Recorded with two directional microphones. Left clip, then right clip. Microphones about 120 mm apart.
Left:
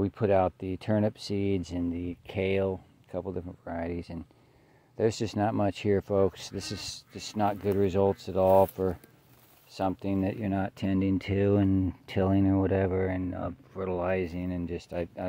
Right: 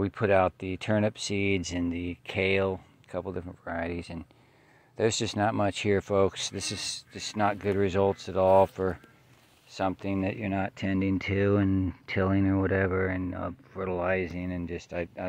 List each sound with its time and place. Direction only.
0.0 s speech: 40° left (ahead or behind); by 2.8 s 20° left (ahead or behind)
3.1 s speech: 35° left (ahead or behind)
9.7 s speech: 35° left (ahead or behind)
9.9 s speech: 45° left (ahead or behind)